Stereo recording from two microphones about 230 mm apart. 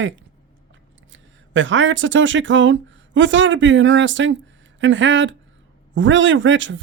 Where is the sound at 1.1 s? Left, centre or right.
Right.